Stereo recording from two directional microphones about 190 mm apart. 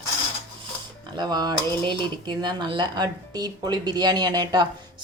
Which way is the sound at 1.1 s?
20° right (ahead or behind).